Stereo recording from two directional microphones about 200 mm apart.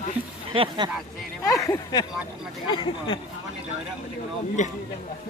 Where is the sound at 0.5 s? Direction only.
25° right (ahead or behind).